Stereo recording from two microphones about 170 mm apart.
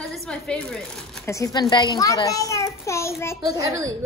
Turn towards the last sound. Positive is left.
turn(degrees=-20)  # may be behind; listen again after turning